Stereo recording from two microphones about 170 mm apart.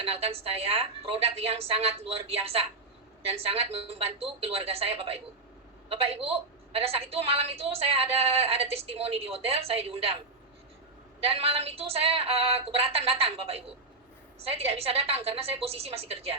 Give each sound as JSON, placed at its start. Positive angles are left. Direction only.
{"t": 0.0, "sound": "a woman's voice", "side_deg": -35}
{"t": 11.2, "sound": "a woman's voice", "side_deg": -35}